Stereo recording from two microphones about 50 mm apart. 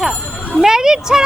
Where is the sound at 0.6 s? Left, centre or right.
Centre.